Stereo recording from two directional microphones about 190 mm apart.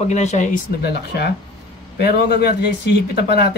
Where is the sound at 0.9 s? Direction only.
60° left (ahead or behind).